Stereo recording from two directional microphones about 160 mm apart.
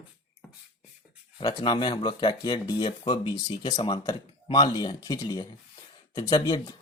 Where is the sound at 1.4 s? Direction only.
25° left (ahead or behind).